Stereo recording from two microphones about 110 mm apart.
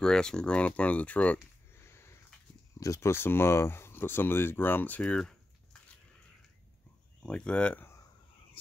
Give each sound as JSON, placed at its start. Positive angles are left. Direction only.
{"t": 0.0, "sound": "speech", "side_deg": 5}
{"t": 1.8, "sound": "a sound", "side_deg": 25}
{"t": 2.8, "sound": "speech", "side_deg": 25}
{"t": 7.2, "sound": "speech", "side_deg": 10}